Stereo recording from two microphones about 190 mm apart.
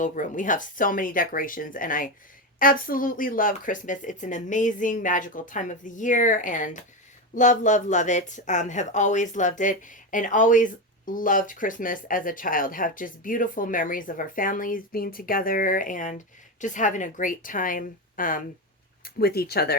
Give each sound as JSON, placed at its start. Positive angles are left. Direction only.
{"t": 0.0, "sound": "speech", "side_deg": 45}